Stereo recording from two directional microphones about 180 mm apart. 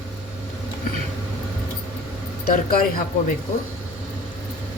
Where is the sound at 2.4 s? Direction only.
50° left (ahead or behind).